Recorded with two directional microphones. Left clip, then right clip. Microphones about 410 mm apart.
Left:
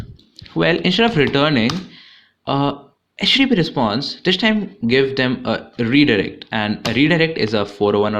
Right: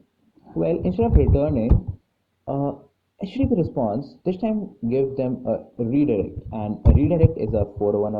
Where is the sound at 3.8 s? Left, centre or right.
Left.